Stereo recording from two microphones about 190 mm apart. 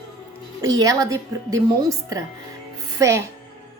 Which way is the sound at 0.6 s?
20° right (ahead or behind).